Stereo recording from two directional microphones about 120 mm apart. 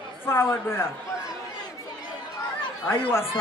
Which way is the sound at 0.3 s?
20° left (ahead or behind).